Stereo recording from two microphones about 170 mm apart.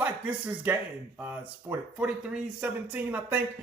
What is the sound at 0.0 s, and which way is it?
Speech, 10° right (ahead or behind).